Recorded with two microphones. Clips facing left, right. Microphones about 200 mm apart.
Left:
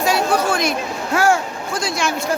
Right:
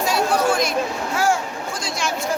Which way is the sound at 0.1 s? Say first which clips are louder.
Even; 70° left (ahead or behind).